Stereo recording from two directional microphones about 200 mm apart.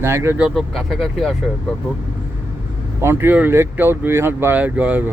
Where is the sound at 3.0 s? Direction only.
10° right (ahead or behind).